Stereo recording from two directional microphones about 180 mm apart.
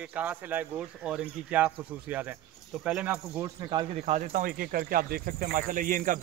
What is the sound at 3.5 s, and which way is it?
Speech, 25° right (ahead or behind).